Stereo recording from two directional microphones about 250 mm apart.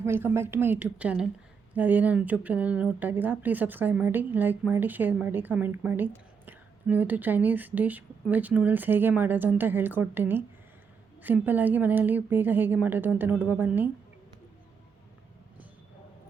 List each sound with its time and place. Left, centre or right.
0.0 s speech: centre